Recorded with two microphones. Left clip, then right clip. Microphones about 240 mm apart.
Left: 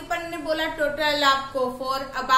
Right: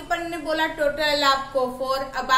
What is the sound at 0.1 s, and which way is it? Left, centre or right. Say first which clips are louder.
A woman's voice: right 1 dB; centre.